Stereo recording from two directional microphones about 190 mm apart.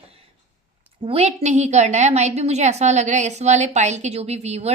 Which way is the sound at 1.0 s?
35° right (ahead or behind).